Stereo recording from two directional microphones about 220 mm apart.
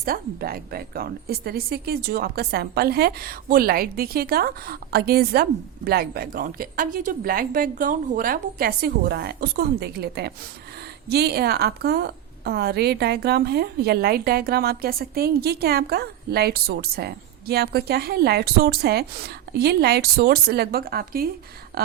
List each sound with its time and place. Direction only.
0.0 s speech: 45° right (ahead or behind)